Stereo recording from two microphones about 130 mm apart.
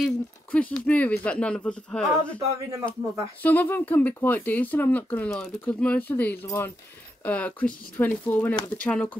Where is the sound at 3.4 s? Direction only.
15° left (ahead or behind).